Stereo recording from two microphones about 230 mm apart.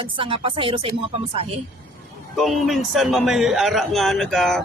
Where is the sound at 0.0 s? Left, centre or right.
Right.